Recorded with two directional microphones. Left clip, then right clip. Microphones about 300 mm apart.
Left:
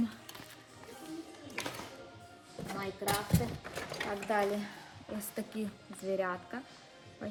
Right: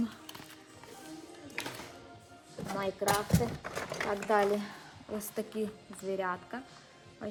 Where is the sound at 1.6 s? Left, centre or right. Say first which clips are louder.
Even; centre.